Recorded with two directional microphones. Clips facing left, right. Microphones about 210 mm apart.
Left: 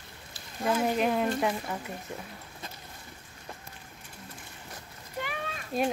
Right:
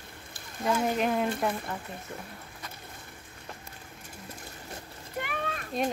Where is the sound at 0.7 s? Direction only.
Centre (ahead or behind).